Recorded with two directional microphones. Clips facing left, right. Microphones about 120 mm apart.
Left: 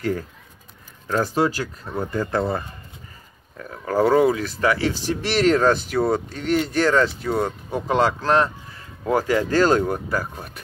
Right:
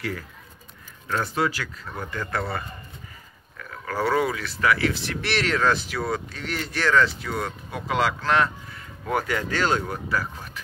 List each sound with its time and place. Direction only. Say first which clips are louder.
1.0 s speech: left 4 dB; 35° left (ahead or behind)
3.5 s speech: left 7 dB; 35° left (ahead or behind)